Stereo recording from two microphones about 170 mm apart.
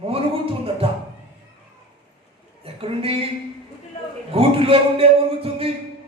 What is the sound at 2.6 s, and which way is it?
Speech, 35° right (ahead or behind).